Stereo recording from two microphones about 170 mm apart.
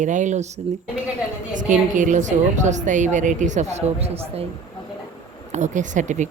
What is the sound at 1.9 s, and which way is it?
A woman's voice, 50° right (ahead or behind).